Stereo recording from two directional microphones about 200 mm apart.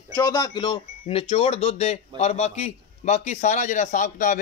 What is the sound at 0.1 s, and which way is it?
Speech, 15° left (ahead or behind).